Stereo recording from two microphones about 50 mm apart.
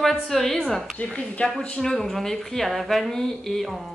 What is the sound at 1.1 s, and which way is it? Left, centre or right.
Speech, left.